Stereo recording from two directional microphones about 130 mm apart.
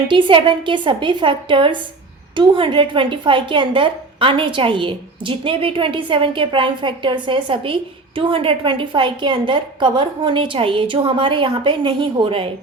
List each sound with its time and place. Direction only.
0.1 s a woman's voice: 40° right (ahead or behind)